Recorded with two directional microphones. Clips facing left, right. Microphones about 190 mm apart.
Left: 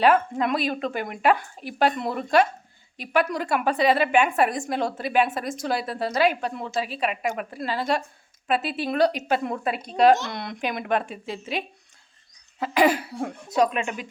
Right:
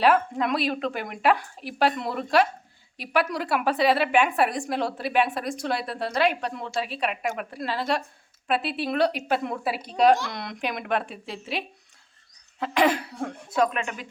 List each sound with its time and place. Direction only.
0.0 s a woman's voice: centre (ahead or behind)
13.6 s speech: 20° left (ahead or behind)